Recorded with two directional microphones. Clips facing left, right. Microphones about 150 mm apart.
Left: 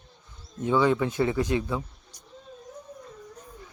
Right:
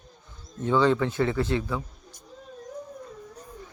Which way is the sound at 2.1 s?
50° right (ahead or behind).